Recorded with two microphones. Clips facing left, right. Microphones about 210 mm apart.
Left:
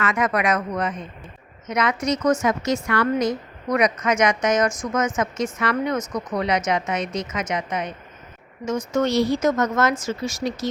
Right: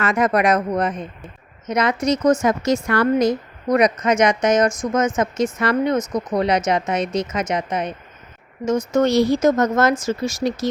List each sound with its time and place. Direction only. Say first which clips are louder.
0.0 s a woman's voice: right 4 dB; 35° right (ahead or behind)
8.9 s a woman's voice: right 3 dB; 40° right (ahead or behind)